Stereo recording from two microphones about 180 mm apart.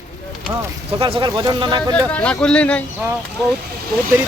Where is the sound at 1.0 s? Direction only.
30° right (ahead or behind).